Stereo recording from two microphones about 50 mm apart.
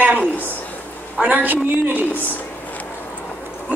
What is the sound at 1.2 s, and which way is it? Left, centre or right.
Speech, right.